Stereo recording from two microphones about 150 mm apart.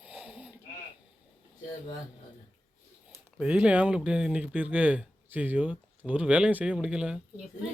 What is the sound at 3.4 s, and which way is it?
Speech, 10° right (ahead or behind).